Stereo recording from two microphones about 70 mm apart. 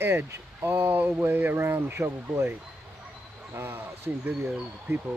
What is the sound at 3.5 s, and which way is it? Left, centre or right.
Speech, right.